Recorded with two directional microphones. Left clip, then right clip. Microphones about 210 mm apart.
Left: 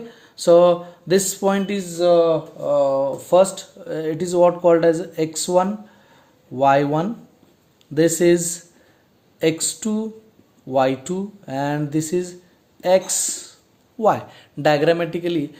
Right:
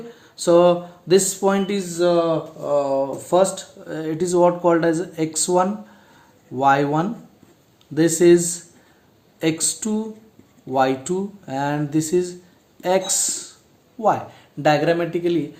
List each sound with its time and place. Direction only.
0.1 s speech: 25° left (ahead or behind)
14.0 s speech: 35° left (ahead or behind)